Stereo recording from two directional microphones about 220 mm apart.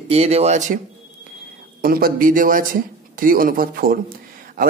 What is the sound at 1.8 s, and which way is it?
Speech, 40° right (ahead or behind).